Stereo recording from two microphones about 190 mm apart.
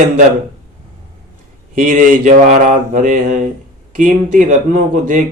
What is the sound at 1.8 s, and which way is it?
Mantra, 45° right (ahead or behind).